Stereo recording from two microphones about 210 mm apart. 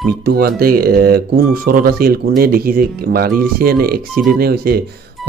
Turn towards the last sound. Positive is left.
turn(degrees=-45)  # may be behind; listen again after turning